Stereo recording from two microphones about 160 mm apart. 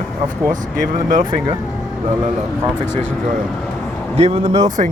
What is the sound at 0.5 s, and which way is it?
Speech, 55° right (ahead or behind).